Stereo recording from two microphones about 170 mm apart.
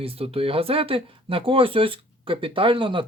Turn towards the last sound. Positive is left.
turn(degrees=-30)  # may be behind; listen again after turning